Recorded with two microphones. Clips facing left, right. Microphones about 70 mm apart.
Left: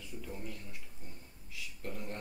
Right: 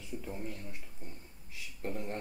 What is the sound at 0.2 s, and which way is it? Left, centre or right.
Speech, right.